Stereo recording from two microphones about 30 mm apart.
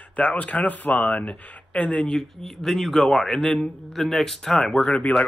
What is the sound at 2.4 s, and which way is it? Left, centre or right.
Speech, centre.